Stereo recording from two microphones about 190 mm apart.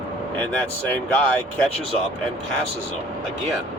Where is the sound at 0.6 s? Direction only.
5° left (ahead or behind).